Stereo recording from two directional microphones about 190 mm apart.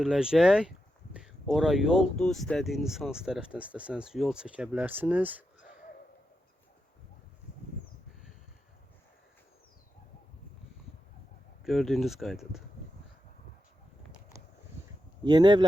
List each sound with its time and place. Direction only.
0.0 s speech: 5° right (ahead or behind)
11.6 s speech: centre (ahead or behind)
15.2 s speech: 20° right (ahead or behind)